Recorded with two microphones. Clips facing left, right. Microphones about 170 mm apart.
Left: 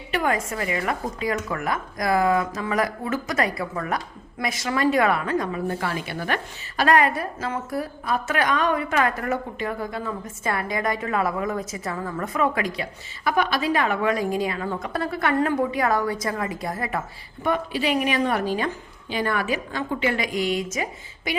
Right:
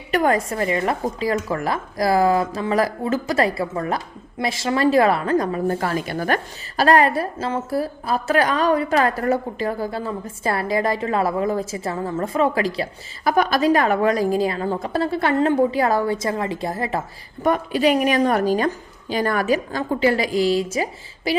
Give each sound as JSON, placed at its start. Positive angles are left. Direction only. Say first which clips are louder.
{"t": 0.1, "sound": "speech", "louder": "right 5 dB", "side_deg": -40}
{"t": 17.4, "sound": "speech", "louder": "right 6 dB", "side_deg": -45}